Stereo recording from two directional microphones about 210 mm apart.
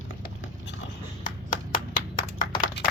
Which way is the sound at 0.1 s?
65° left (ahead or behind).